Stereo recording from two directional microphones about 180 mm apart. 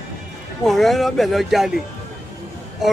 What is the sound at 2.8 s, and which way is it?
Speech, centre (ahead or behind).